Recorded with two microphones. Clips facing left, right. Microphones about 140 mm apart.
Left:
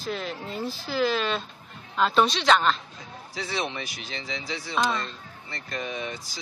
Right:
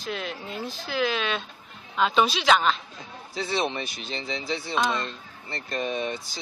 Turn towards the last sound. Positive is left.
turn(degrees=-30)  # may be behind; listen again after turning